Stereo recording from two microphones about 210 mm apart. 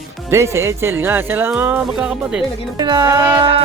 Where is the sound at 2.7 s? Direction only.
20° right (ahead or behind).